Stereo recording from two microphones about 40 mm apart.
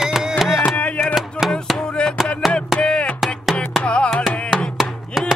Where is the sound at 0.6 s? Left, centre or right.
Left.